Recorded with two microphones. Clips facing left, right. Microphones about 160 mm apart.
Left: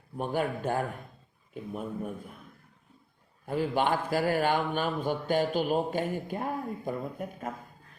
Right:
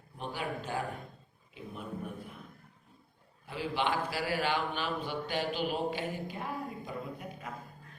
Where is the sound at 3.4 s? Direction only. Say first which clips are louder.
Left 6 dB; 45° left (ahead or behind).